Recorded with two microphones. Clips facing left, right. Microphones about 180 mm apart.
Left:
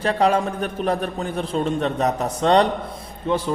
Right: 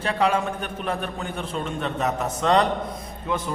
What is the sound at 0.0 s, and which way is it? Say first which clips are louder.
A man's voice: left 4 dB; 40° left (ahead or behind).